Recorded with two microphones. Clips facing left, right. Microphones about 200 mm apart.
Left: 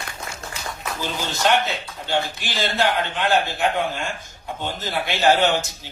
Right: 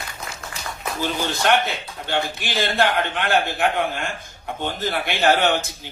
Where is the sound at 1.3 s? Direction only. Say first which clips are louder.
Left 1 dB; 55° right (ahead or behind).